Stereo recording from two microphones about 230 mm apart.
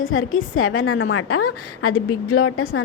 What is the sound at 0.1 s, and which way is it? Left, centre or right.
A woman's voice, left.